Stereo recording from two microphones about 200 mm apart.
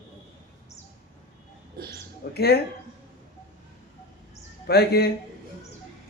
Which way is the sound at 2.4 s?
55° left (ahead or behind).